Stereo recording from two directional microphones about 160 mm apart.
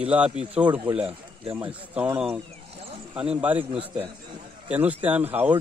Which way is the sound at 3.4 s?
10° right (ahead or behind).